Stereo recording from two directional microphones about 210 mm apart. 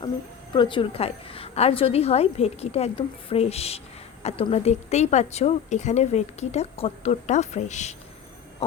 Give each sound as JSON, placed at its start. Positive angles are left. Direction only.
{"t": 0.5, "sound": "a woman's voice", "side_deg": 25}